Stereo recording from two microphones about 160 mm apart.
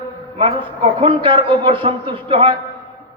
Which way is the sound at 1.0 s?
35° right (ahead or behind).